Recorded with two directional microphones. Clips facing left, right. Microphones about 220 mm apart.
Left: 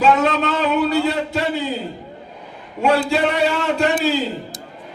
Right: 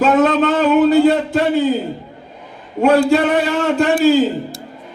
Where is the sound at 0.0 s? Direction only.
45° right (ahead or behind).